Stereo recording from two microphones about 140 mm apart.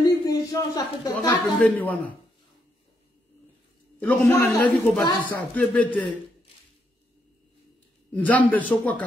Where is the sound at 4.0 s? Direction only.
15° left (ahead or behind).